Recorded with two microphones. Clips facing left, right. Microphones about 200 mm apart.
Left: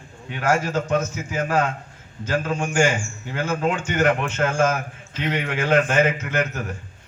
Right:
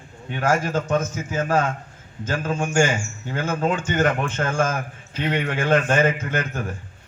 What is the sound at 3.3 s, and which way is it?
A man's voice, 40° right (ahead or behind).